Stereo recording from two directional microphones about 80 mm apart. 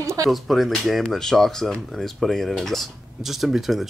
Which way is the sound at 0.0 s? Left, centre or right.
Right.